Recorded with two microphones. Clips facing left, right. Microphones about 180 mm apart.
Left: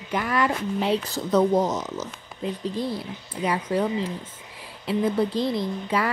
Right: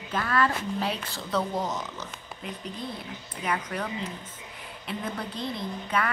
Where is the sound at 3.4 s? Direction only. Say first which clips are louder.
Left 7 dB; 30° left (ahead or behind).